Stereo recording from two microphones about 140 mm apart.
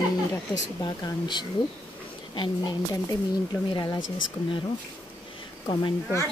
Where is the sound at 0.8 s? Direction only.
35° left (ahead or behind).